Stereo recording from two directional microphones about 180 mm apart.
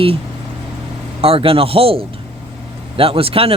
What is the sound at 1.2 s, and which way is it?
Speech, 30° right (ahead or behind).